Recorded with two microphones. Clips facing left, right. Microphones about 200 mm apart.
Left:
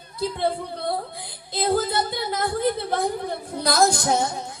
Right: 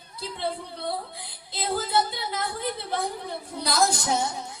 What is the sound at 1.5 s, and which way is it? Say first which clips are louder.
A woman's voice: left 4 dB; 50° left (ahead or behind).